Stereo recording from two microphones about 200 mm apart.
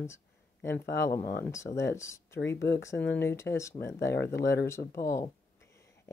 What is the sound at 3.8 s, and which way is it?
Speech, 55° left (ahead or behind).